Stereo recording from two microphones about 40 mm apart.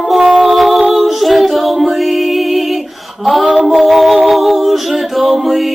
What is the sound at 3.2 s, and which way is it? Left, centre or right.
Female singing, centre.